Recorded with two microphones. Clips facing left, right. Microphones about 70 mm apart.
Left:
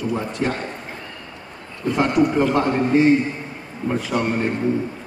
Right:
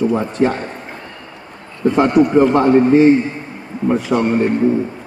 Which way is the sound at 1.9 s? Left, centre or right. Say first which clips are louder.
Right 6 dB; right.